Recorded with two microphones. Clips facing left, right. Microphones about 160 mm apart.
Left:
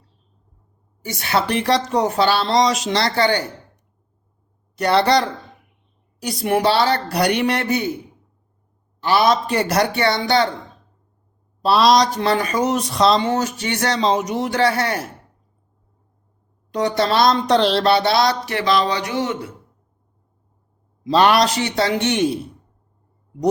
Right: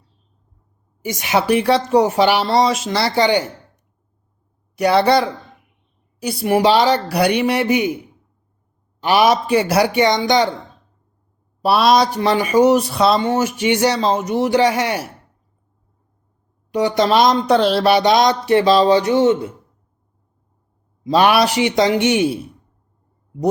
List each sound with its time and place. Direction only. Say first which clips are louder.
1.0 s speech: right 3 dB; 15° right (ahead or behind)
4.8 s speech: right 2 dB; 5° right (ahead or behind)
9.0 s speech: right 2 dB; 15° right (ahead or behind)
11.9 s speech: right 2 dB; 10° right (ahead or behind)
14.6 s speech: right 2 dB; 15° right (ahead or behind)
16.7 s speech: right 3 dB; 15° right (ahead or behind)
21.0 s speech: right 1 dB; 5° right (ahead or behind)